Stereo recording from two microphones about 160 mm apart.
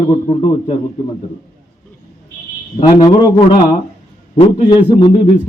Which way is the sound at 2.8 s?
25° left (ahead or behind).